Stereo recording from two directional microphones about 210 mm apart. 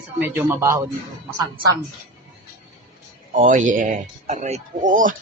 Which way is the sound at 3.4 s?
35° right (ahead or behind).